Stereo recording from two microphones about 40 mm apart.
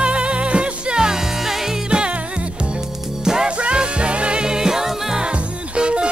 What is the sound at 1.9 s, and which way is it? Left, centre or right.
Music, right.